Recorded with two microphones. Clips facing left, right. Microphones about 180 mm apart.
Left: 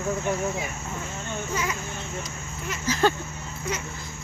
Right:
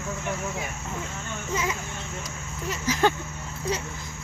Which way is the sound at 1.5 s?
25° right (ahead or behind).